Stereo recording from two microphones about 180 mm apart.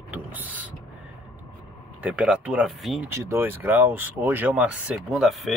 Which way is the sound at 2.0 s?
5° right (ahead or behind).